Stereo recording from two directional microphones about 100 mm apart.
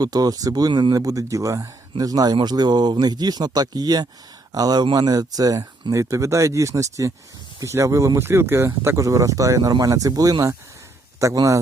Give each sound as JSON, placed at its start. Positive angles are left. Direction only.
{"t": 0.0, "sound": "speech", "side_deg": -40}
{"t": 0.9, "sound": "speech", "side_deg": -35}